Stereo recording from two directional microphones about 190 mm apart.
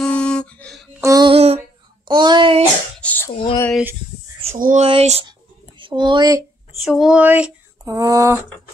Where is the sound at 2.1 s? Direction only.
25° right (ahead or behind).